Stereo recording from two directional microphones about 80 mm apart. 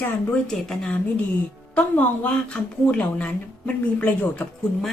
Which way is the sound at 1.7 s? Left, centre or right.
Centre.